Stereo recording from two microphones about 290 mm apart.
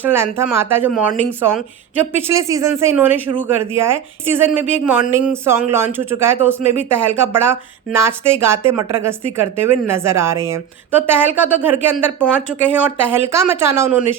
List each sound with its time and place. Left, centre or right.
0.0 s speech: centre